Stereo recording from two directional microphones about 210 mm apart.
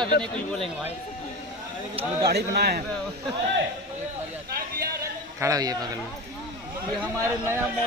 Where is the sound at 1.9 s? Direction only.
25° right (ahead or behind).